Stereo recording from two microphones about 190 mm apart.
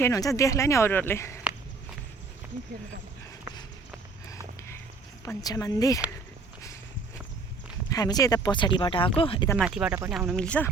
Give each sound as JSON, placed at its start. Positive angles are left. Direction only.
{"t": 0.0, "sound": "speech", "side_deg": 15}
{"t": 5.2, "sound": "speech", "side_deg": 20}
{"t": 7.9, "sound": "speech", "side_deg": 20}
{"t": 9.6, "sound": "speech", "side_deg": -5}